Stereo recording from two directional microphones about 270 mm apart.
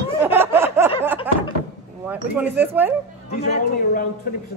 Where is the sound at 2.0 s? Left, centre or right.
Centre.